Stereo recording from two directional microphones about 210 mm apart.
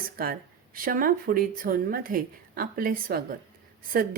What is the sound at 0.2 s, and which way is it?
A woman's voice, 45° right (ahead or behind).